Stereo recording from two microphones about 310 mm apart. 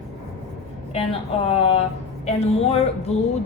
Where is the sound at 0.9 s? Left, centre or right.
Centre.